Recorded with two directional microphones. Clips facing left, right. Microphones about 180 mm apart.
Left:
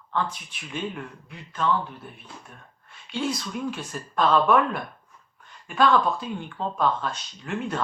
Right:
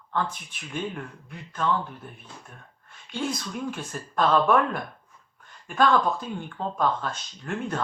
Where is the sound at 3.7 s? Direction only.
45° right (ahead or behind).